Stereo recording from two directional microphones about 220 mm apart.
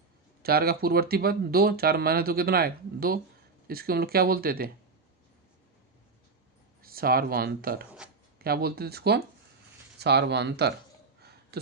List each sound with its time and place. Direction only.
0.4 s speech: 45° right (ahead or behind)
6.8 s speech: 40° right (ahead or behind)
11.5 s a sound: 45° right (ahead or behind)